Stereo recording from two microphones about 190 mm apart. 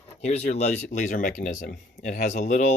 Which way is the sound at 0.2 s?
35° left (ahead or behind).